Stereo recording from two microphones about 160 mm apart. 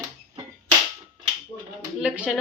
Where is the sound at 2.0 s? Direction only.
5° right (ahead or behind).